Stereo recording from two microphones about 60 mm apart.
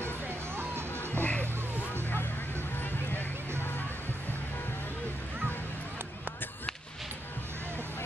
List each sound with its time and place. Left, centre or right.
0.0 s music: right
1.2 s music: left
2.8 s a sound: left